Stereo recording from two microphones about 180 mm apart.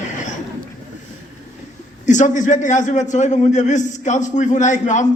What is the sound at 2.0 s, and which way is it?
A man's voice, 45° left (ahead or behind).